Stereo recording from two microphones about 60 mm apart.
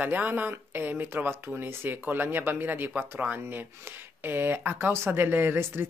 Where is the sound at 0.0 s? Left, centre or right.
Right.